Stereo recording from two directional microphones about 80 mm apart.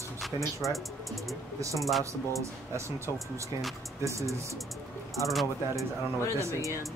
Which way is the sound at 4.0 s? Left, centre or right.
Right.